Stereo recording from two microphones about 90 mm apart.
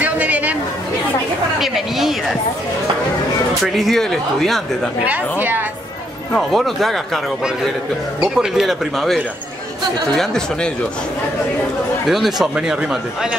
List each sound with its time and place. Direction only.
0.0 s chatter: 15° right (ahead or behind)
1.6 s speech: 5° right (ahead or behind)
3.6 s speech: centre (ahead or behind)
5.0 s a woman's voice: 20° right (ahead or behind)
6.3 s speech: centre (ahead or behind)
8.2 s speech: 5° right (ahead or behind)
12.1 s speech: centre (ahead or behind)